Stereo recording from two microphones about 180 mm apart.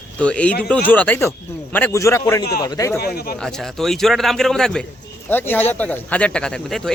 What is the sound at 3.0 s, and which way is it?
Speech, 60° left (ahead or behind).